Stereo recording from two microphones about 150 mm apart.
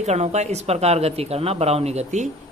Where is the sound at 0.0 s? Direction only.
45° right (ahead or behind).